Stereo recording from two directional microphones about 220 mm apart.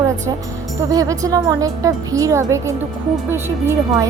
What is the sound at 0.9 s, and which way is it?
Speech, 15° right (ahead or behind).